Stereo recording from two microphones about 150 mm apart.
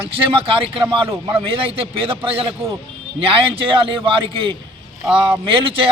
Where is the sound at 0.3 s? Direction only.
40° right (ahead or behind).